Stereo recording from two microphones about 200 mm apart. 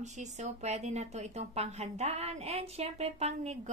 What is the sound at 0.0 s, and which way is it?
A woman's voice, 35° right (ahead or behind).